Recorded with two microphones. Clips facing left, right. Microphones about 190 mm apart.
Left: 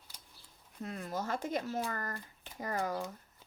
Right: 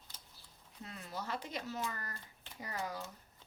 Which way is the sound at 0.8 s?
50° left (ahead or behind).